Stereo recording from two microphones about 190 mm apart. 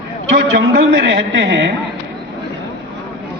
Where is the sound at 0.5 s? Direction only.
60° right (ahead or behind).